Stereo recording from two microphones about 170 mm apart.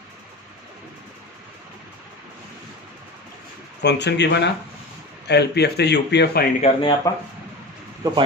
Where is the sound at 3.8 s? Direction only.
90° left.